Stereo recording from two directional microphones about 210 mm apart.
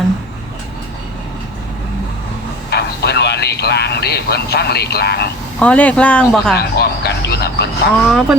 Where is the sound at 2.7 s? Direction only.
50° left (ahead or behind).